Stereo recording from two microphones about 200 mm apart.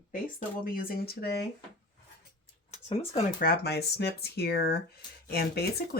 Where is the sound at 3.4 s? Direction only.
50° left (ahead or behind).